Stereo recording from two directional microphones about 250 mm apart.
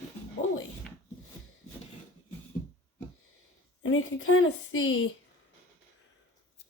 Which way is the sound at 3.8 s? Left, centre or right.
Left.